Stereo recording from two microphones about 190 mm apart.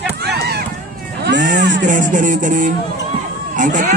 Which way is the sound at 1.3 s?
70° right (ahead or behind).